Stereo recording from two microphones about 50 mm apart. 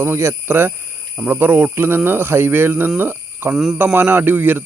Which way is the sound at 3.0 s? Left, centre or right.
Right.